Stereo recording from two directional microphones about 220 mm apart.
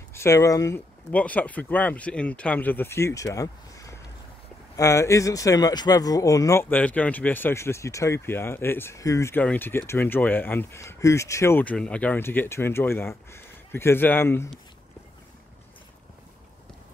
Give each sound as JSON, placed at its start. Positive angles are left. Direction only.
{"t": 0.1, "sound": "speech", "side_deg": 10}